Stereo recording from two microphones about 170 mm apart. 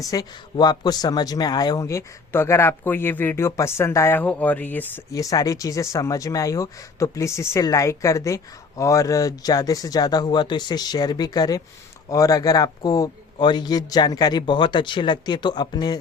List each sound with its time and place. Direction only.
0.0 s speech: 20° left (ahead or behind)
5.1 s speech: 20° left (ahead or behind)